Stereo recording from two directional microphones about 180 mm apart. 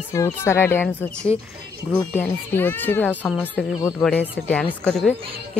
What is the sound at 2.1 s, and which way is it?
Speech, 10° left (ahead or behind).